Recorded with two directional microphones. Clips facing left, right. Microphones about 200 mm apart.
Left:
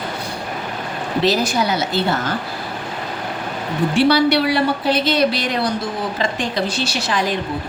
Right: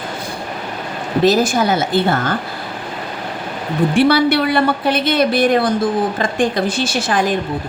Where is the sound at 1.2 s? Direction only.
50° right (ahead or behind).